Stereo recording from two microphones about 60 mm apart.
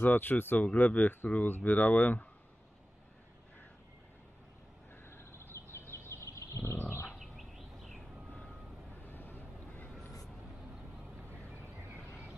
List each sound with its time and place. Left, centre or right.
0.0 s speech: left
5.0 s a sound: left
7.1 s bird: centre
9.0 s vehicle: left